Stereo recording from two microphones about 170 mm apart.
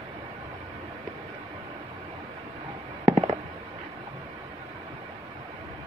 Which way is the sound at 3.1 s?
25° right (ahead or behind).